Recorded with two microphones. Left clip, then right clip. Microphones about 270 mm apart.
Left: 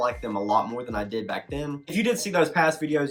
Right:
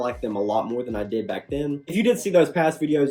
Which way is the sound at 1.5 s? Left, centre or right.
Left.